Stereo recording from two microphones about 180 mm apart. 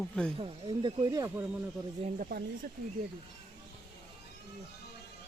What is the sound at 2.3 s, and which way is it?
Speech, 60° right (ahead or behind).